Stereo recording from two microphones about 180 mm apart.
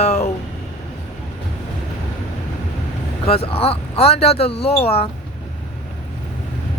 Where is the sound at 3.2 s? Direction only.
35° left (ahead or behind).